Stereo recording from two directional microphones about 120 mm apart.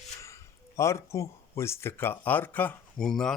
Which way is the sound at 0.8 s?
25° left (ahead or behind).